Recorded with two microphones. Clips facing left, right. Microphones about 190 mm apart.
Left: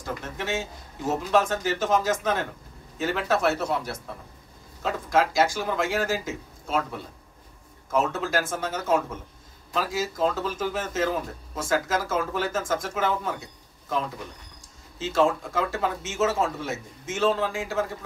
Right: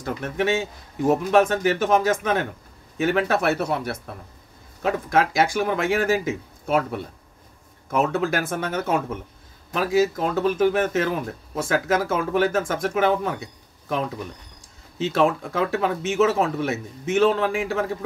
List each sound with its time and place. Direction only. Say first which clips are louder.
0.0 s a man's voice: right 8 dB; 65° right (ahead or behind)
15.0 s a man's voice: right 2 dB; 65° right (ahead or behind)